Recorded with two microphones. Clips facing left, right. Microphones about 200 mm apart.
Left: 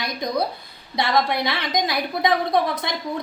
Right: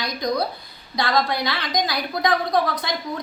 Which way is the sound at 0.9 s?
25° left (ahead or behind).